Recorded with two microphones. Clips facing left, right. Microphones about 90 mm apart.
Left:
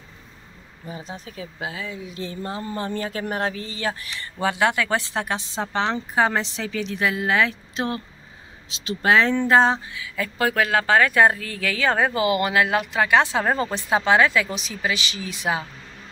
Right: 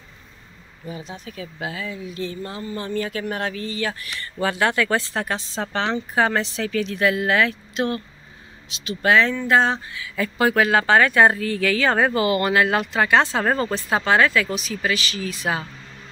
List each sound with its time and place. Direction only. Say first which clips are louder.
0.8 s speech: right 1 dB; 35° left (ahead or behind)
9.9 s speech: right 3 dB; centre (ahead or behind); by 15.6 s 15° left (ahead or behind)